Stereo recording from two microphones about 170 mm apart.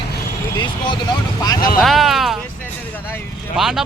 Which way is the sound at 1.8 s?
Centre (ahead or behind).